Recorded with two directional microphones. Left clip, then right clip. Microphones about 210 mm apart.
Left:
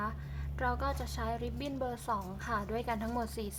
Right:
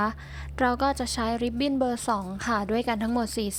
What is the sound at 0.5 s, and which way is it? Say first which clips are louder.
A woman's voice: right 10 dB; 40° right (ahead or behind).